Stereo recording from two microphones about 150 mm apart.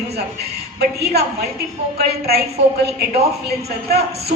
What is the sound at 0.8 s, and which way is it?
A woman's voice, 90° right.